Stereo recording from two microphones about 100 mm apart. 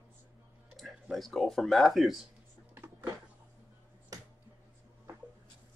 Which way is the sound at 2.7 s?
25° right (ahead or behind).